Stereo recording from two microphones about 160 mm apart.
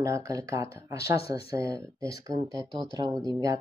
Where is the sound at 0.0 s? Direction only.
20° right (ahead or behind).